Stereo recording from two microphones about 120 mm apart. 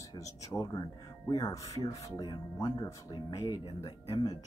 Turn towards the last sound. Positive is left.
turn(degrees=35)  # may be behind; listen again after turning